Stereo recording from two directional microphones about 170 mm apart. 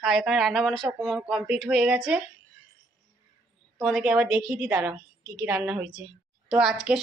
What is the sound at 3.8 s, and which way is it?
A woman's voice, centre (ahead or behind).